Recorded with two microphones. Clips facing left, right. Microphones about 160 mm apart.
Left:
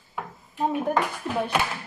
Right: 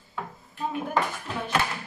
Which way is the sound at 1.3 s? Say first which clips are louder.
Left 6 dB; 5° left (ahead or behind).